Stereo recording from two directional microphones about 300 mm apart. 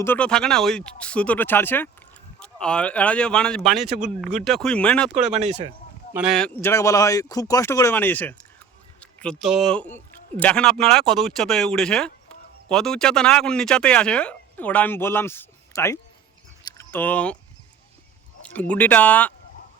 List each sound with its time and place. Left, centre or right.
0.0 s speech: centre
5.1 s speech: right
6.1 s speech: centre
16.6 s a sound: centre
18.5 s speech: centre